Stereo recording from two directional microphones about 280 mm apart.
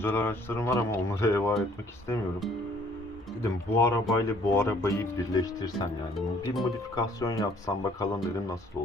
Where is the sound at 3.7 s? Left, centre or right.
Centre.